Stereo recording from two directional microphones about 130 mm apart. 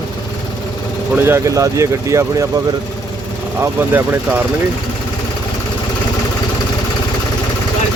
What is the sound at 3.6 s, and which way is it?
Speech, 15° right (ahead or behind).